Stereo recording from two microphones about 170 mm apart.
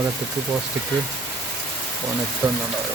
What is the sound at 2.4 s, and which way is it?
Speech, 10° right (ahead or behind).